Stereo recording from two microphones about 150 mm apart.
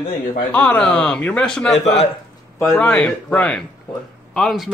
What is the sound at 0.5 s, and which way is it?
Speech, 10° left (ahead or behind).